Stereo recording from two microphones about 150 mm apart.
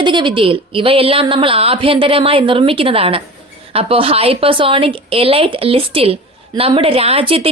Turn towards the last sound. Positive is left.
turn(degrees=-40)  # may be behind; listen again after turning